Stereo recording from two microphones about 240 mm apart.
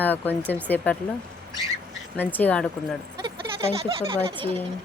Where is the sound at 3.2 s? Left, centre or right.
Right.